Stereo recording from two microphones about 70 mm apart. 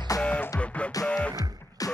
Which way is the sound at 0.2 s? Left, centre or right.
Centre.